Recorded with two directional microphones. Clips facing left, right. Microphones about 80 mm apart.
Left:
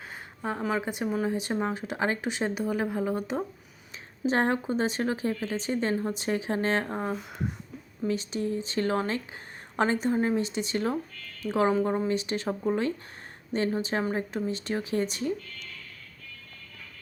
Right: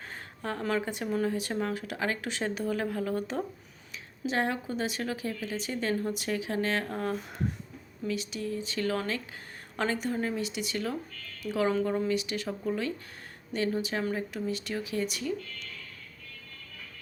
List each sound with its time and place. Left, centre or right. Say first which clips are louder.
0.4 s speech: left 1 dB; centre
4.3 s a woman's voice: left 4 dB; left